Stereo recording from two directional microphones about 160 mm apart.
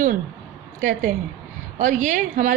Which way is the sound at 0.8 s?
55° right (ahead or behind).